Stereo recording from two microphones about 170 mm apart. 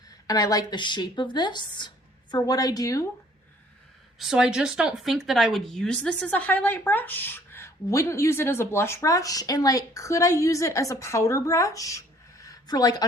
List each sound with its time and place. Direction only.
0.3 s speech: 20° left (ahead or behind)
4.2 s speech: 5° right (ahead or behind); by 13.1 s 20° left (ahead or behind)